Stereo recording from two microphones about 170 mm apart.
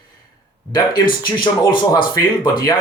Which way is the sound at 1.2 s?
25° left (ahead or behind).